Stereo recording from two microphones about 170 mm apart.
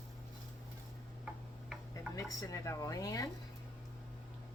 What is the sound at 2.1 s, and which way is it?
Speech, 20° left (ahead or behind).